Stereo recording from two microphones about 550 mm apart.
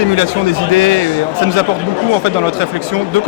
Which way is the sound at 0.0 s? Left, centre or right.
Right.